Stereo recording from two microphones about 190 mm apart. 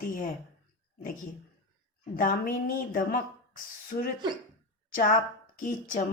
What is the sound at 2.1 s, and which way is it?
A woman's voice, 45° left (ahead or behind).